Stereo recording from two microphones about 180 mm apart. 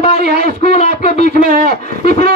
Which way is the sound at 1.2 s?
55° right (ahead or behind).